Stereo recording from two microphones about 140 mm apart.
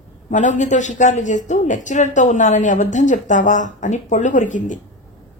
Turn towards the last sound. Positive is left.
turn(degrees=60)  # may be behind; listen again after turning